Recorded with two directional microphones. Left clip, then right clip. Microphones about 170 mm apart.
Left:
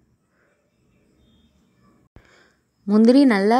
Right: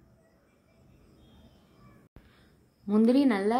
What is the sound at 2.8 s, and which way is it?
Speech, 40° left (ahead or behind).